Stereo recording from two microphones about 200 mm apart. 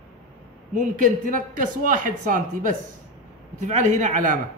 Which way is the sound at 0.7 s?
40° right (ahead or behind).